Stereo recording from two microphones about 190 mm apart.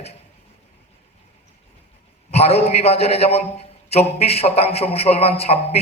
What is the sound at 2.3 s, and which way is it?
A man's voice, 35° left (ahead or behind).